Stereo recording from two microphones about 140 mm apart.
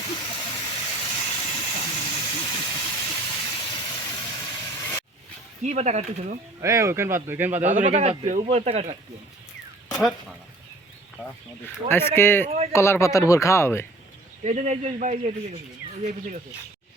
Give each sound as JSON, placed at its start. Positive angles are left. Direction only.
{"t": 0.1, "sound": "steam", "side_deg": 35}
{"t": 1.6, "sound": "steam", "side_deg": 45}
{"t": 5.6, "sound": "speech", "side_deg": -55}
{"t": 6.6, "sound": "speech", "side_deg": -20}
{"t": 7.6, "sound": "speech", "side_deg": -60}
{"t": 9.9, "sound": "speech", "side_deg": 0}
{"t": 11.6, "sound": "speech", "side_deg": 15}
{"t": 14.4, "sound": "speech", "side_deg": -55}